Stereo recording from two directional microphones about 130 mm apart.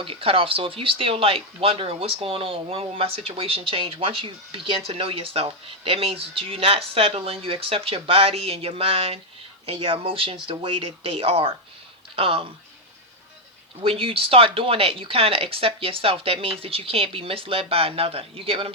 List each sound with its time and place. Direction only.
0.0 s speech: 45° right (ahead or behind)
13.8 s speech: 45° right (ahead or behind)